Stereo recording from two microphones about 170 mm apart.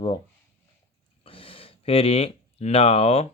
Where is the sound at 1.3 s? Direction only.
35° left (ahead or behind).